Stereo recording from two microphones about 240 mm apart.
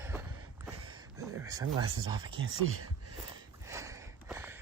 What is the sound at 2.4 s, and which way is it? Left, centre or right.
Speech, right.